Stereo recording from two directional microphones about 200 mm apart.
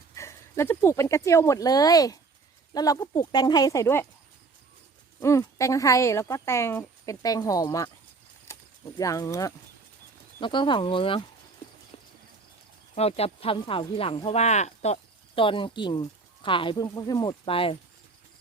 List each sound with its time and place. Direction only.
0.2 s speech: 15° left (ahead or behind)
5.2 s a woman's voice: 15° left (ahead or behind)
8.5 s a sound: 15° left (ahead or behind)
9.0 s a woman's voice: 15° left (ahead or behind)
13.0 s speech: 30° left (ahead or behind)